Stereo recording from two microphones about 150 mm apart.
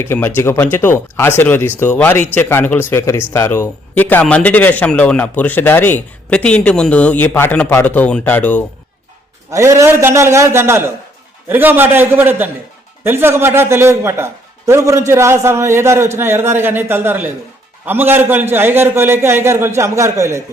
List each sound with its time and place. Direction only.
0.0 s speech: 15° left (ahead or behind)
9.5 s a man's voice: 20° right (ahead or behind)